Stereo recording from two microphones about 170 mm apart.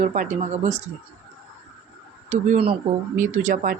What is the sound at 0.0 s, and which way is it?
Speech, 45° right (ahead or behind).